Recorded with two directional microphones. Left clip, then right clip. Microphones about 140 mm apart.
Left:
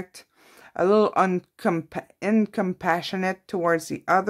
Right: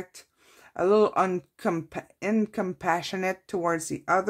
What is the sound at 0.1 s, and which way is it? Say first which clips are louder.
Speech: left 3 dB; 30° left (ahead or behind).